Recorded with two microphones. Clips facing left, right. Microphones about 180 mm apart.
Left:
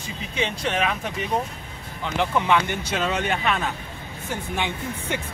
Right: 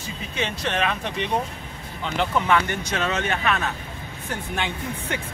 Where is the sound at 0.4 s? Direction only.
10° left (ahead or behind).